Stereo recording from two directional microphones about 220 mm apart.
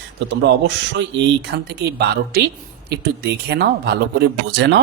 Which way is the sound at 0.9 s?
50° right (ahead or behind).